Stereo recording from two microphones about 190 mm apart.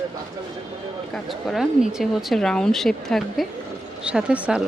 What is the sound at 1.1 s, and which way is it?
A woman's voice, centre (ahead or behind).